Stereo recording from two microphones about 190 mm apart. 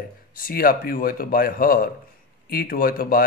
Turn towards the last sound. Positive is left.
turn(degrees=50)  # may be behind; listen again after turning